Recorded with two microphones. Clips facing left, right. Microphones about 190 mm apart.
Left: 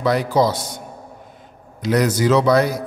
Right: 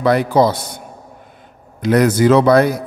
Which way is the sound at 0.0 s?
60° right (ahead or behind).